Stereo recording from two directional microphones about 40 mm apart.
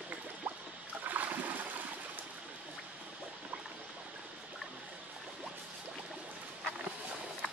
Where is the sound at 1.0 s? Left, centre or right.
Right.